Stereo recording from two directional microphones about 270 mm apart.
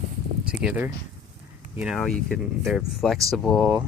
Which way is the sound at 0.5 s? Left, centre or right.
Centre.